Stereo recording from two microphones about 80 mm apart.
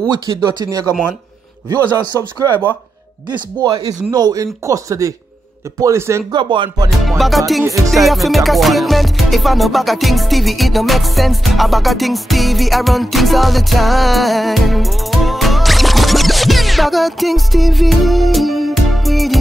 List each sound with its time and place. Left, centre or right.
0.1 s speech: right
3.3 s speech: right
3.8 s speech: right
6.3 s music: right
7.1 s music: centre
7.6 s speech: right
7.9 s music: centre